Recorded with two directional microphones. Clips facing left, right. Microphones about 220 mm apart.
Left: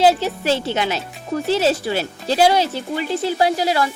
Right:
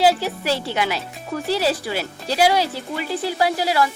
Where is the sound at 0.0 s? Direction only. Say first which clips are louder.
Left 2 dB; 20° left (ahead or behind).